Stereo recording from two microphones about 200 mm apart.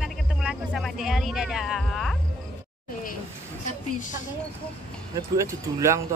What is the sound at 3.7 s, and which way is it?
Speech, 40° left (ahead or behind).